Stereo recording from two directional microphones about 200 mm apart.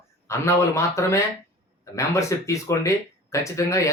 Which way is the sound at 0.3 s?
15° left (ahead or behind).